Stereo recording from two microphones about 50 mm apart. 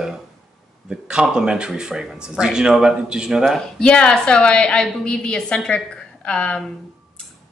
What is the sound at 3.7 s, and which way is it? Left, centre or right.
A woman's voice, left.